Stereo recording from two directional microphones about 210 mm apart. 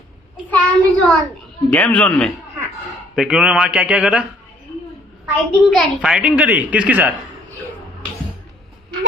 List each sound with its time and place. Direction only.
0.5 s child singing: 5° left (ahead or behind)
1.7 s a man's voice: 5° left (ahead or behind)